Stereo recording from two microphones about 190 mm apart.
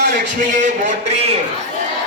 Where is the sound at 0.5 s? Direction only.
40° right (ahead or behind).